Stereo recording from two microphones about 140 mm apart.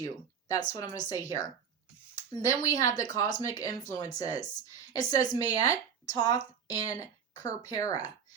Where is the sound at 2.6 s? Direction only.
25° left (ahead or behind).